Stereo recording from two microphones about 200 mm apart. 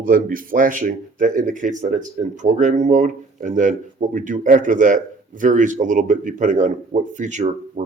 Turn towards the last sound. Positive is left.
turn(degrees=-35)  # may be behind; listen again after turning